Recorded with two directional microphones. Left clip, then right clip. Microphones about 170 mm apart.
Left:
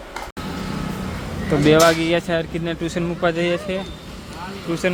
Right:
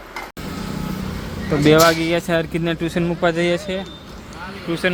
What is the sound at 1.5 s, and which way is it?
Speech, 5° right (ahead or behind).